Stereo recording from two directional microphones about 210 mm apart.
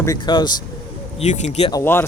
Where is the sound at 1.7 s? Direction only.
10° left (ahead or behind).